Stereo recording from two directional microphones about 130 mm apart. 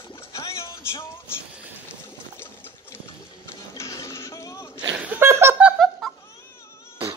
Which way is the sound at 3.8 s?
20° left (ahead or behind).